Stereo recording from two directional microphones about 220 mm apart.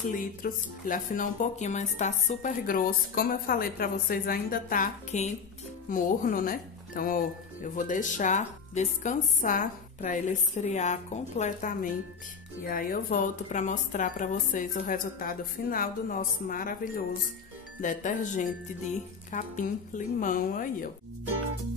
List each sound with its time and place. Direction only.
0.1 s speech: 40° left (ahead or behind)